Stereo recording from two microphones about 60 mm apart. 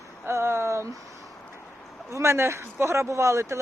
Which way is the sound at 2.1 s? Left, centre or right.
Right.